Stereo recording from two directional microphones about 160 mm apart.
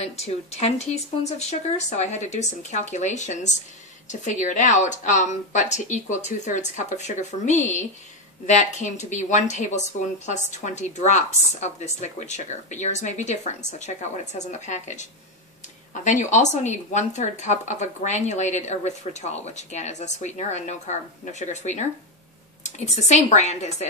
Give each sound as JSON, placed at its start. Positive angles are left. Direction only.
{"t": 0.0, "sound": "a woman's voice", "side_deg": 40}